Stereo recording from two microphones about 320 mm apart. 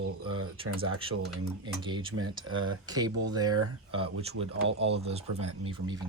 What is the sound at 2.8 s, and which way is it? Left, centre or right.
Speech, centre.